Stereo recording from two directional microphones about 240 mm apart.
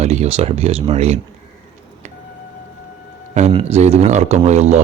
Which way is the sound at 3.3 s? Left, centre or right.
Right.